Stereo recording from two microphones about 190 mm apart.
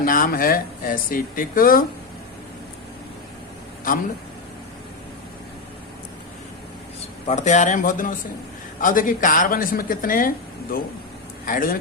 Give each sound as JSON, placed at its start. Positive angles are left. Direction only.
{"t": 0.0, "sound": "speech", "side_deg": 45}
{"t": 7.3, "sound": "speech", "side_deg": 40}